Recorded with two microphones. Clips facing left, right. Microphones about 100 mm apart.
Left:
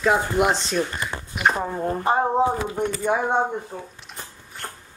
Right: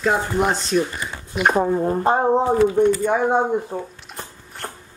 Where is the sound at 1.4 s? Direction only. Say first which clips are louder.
Right 4 dB; 40° right (ahead or behind).